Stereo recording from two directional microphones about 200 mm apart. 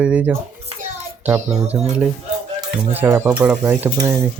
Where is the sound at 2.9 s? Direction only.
10° right (ahead or behind).